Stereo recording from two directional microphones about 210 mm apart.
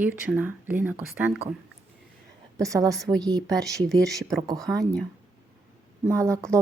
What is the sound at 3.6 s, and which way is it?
Speech, centre (ahead or behind).